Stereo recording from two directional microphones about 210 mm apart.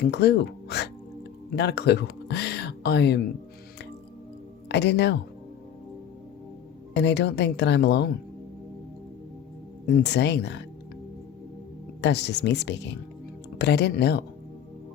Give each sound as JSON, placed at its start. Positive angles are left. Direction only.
{"t": 0.0, "sound": "a woman's voice", "side_deg": 50}
{"t": 4.7, "sound": "a woman's voice", "side_deg": 50}
{"t": 6.9, "sound": "a woman's voice", "side_deg": 55}
{"t": 9.8, "sound": "a woman's voice", "side_deg": 55}
{"t": 12.0, "sound": "a woman's voice", "side_deg": 55}